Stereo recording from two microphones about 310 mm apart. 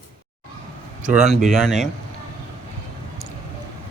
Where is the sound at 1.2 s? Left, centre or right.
Centre.